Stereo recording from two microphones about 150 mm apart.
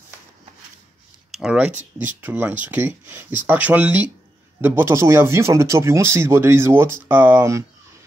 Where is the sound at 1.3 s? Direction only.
5° right (ahead or behind).